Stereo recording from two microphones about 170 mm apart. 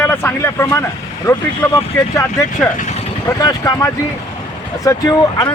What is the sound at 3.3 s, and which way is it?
Speech, 20° left (ahead or behind).